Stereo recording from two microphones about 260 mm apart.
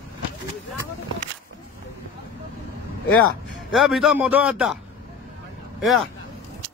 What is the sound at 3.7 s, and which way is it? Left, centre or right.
A man's voice, centre.